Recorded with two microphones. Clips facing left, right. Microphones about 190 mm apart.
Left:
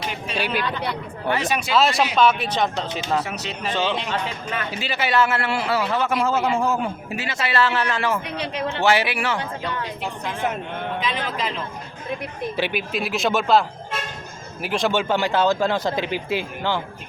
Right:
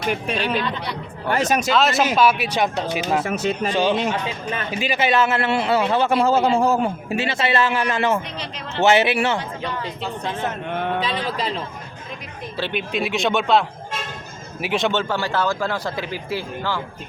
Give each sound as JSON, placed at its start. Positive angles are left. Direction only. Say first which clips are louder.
{"t": 0.3, "sound": "speech", "louder": "left 2 dB", "side_deg": 10}
{"t": 1.3, "sound": "speech", "louder": "right 3 dB", "side_deg": -45}
{"t": 1.7, "sound": "a man's voice", "louder": "left 2 dB", "side_deg": 0}
{"t": 3.2, "sound": "speech", "louder": "right 8 dB", "side_deg": -50}
{"t": 3.7, "sound": "a man's voice", "louder": "right 2 dB", "side_deg": -10}
{"t": 8.2, "sound": "a man's voice", "louder": "left 6 dB", "side_deg": 60}
{"t": 8.8, "sound": "a man's voice", "louder": "right 5 dB", "side_deg": -25}
{"t": 11.0, "sound": "speech", "louder": "right 2 dB", "side_deg": -35}
{"t": 12.5, "sound": "speech", "louder": "even", "side_deg": 15}
{"t": 12.9, "sound": "a man's voice", "louder": "right 4 dB", "side_deg": 0}
{"t": 14.9, "sound": "speech", "louder": "left 2 dB", "side_deg": 20}